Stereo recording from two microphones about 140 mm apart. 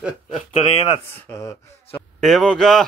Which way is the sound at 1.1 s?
20° left (ahead or behind).